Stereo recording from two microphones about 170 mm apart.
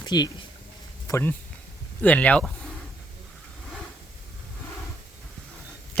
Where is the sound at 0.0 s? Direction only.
25° left (ahead or behind).